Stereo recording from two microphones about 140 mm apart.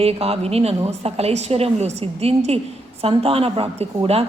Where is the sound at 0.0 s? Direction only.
45° right (ahead or behind).